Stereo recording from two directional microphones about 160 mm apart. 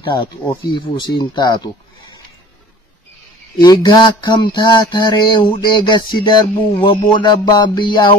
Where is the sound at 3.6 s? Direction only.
25° left (ahead or behind).